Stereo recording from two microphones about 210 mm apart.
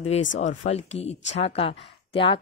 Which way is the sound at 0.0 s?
35° left (ahead or behind).